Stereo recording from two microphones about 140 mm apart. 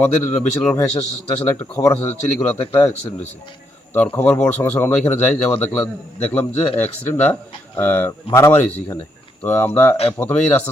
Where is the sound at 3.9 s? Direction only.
15° left (ahead or behind).